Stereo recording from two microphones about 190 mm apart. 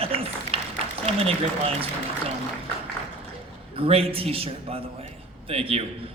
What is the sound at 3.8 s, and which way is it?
A man's voice, 30° right (ahead or behind).